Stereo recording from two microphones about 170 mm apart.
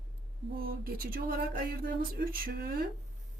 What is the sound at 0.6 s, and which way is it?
Speech, 60° right (ahead or behind).